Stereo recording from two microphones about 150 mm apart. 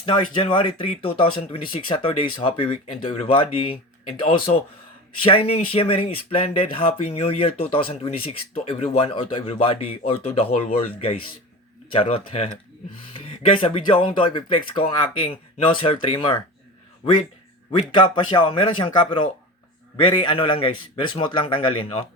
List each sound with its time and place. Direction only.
0.0 s speech: 35° left (ahead or behind)
17.7 s speech: 35° left (ahead or behind)